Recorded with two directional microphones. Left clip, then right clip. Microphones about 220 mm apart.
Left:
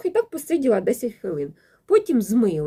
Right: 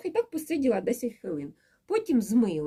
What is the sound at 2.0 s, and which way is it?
Speech, 70° right (ahead or behind).